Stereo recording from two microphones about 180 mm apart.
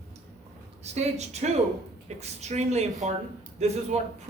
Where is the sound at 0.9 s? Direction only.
40° right (ahead or behind).